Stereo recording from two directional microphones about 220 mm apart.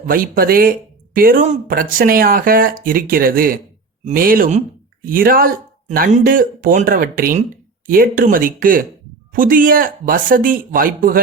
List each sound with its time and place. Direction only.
0.1 s speech: 40° right (ahead or behind)